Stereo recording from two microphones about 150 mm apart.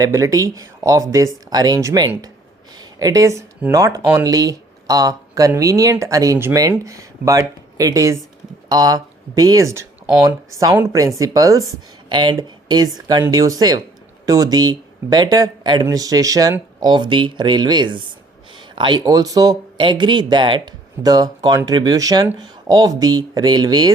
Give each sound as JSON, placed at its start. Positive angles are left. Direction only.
{"t": 0.0, "sound": "speech", "side_deg": -20}